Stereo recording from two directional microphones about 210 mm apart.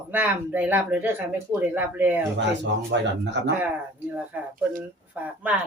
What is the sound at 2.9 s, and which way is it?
Speech, 55° right (ahead or behind).